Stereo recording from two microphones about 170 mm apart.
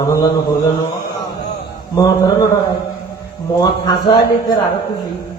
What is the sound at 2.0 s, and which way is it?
Speech, 20° left (ahead or behind).